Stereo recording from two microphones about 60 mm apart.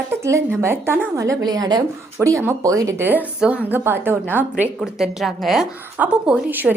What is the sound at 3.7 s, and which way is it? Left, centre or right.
A woman's voice, right.